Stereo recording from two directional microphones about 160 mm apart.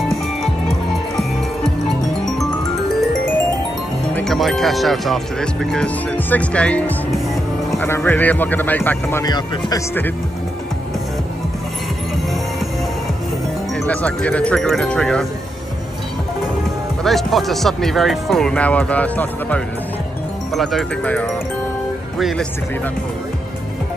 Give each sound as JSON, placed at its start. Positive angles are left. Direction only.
{"t": 0.1, "sound": "music", "side_deg": 0}
{"t": 4.1, "sound": "speech", "side_deg": 5}
{"t": 7.8, "sound": "speech", "side_deg": 10}
{"t": 9.2, "sound": "speech", "side_deg": 25}
{"t": 13.8, "sound": "speech", "side_deg": 10}
{"t": 17.0, "sound": "speech", "side_deg": 0}